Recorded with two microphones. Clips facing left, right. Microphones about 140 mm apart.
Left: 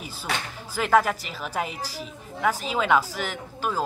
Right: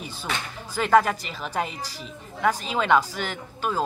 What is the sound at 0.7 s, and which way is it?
A woman's voice, 5° left (ahead or behind).